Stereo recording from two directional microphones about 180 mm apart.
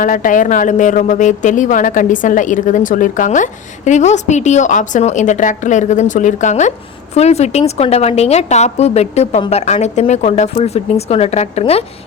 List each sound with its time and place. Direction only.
0.0 s a woman's voice: 50° left (ahead or behind)